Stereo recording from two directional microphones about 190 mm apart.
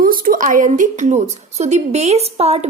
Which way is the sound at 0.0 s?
50° right (ahead or behind).